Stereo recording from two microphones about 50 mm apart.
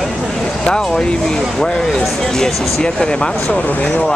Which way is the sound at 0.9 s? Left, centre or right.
Centre.